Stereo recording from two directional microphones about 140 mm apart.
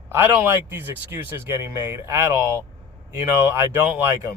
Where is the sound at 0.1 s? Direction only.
15° right (ahead or behind).